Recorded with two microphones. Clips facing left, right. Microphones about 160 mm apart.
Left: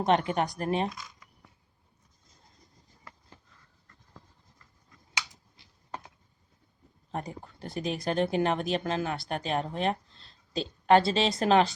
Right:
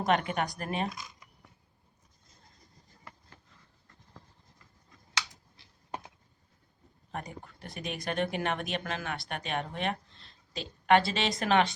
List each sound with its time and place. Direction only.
0.0 s speech: 30° left (ahead or behind)
7.1 s speech: 30° left (ahead or behind)